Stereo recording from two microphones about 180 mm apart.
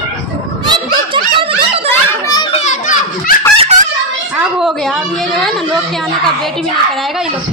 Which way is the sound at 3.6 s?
40° right (ahead or behind).